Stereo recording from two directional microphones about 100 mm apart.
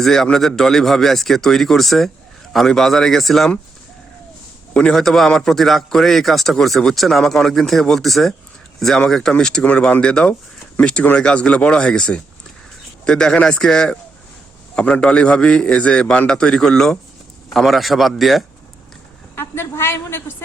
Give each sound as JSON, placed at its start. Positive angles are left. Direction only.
{"t": 0.0, "sound": "a man's voice", "side_deg": 5}
{"t": 4.7, "sound": "a man's voice", "side_deg": 5}
{"t": 19.4, "sound": "a woman's voice", "side_deg": 25}